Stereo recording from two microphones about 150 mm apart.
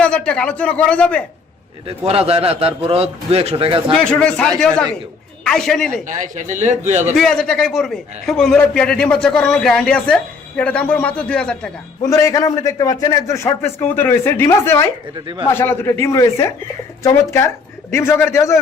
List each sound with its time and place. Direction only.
0.0 s speech: 5° left (ahead or behind)
1.9 s a man's voice: 40° right (ahead or behind)
3.9 s a man's voice: 5° left (ahead or behind)
6.1 s a man's voice: 55° right (ahead or behind)
7.2 s a man's voice: 5° left (ahead or behind)
12.0 s a man's voice: 20° left (ahead or behind)